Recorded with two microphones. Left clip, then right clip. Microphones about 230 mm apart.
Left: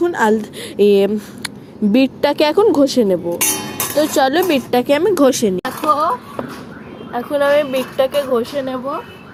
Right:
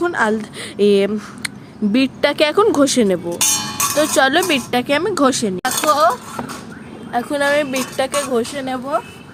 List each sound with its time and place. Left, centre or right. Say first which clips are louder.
0.0 s speech: left 2 dB; centre
5.6 s a sound: right 4 dB; right
7.1 s speech: left 2 dB; right